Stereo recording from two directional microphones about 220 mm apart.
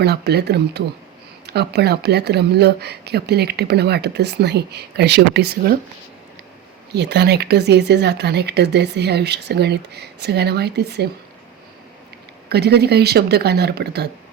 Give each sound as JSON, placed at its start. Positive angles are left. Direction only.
{"t": 0.0, "sound": "speech", "side_deg": -50}
{"t": 6.9, "sound": "speech", "side_deg": -50}
{"t": 12.5, "sound": "speech", "side_deg": -50}